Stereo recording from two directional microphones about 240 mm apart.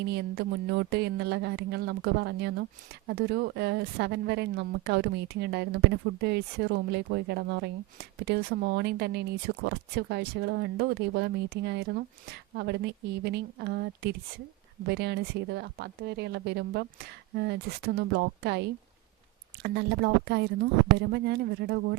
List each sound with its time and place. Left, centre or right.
0.1 s a woman's voice: right